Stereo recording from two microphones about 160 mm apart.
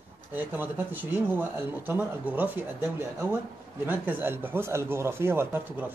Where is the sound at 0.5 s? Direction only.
10° right (ahead or behind).